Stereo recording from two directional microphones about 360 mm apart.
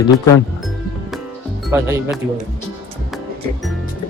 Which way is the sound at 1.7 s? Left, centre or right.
Centre.